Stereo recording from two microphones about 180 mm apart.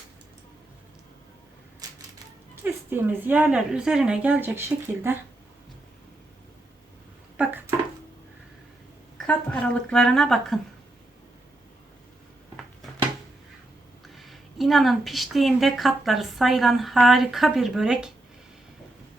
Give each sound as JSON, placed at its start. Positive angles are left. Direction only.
{"t": 1.8, "sound": "typewriter", "side_deg": -20}
{"t": 2.6, "sound": "speech", "side_deg": -10}
{"t": 7.4, "sound": "a sound", "side_deg": -5}
{"t": 9.1, "sound": "a woman's voice", "side_deg": 5}
{"t": 14.2, "sound": "a woman's voice", "side_deg": 0}